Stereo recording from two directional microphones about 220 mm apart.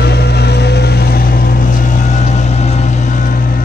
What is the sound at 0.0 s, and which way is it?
Vehicle, 50° left (ahead or behind).